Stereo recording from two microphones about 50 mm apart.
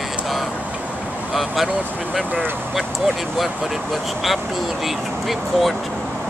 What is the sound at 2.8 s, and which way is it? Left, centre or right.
Speech, centre.